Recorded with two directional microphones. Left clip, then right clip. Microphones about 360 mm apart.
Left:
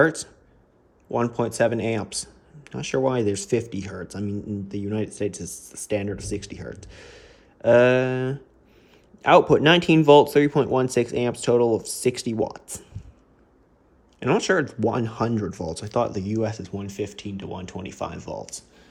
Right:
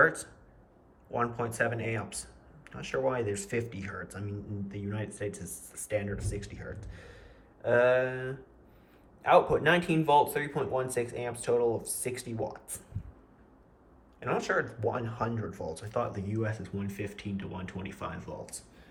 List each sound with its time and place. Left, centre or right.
0.0 s speech: centre
9.5 s speech: centre
14.2 s speech: centre